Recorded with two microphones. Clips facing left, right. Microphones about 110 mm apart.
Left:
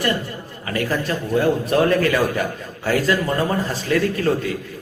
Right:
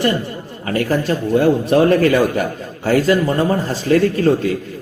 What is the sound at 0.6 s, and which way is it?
A man's voice, 30° right (ahead or behind).